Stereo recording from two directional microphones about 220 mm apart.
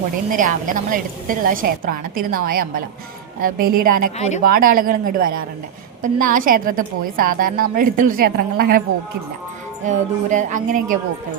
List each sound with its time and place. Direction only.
0.3 s a woman's voice: 35° right (ahead or behind)
9.8 s a woman's voice: 35° right (ahead or behind)